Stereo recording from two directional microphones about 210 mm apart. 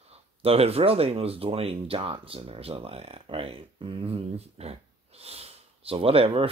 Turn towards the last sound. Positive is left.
turn(degrees=-25)  # may be behind; listen again after turning